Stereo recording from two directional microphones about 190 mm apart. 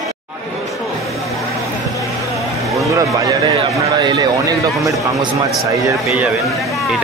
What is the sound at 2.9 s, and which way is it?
A man's voice, 20° right (ahead or behind).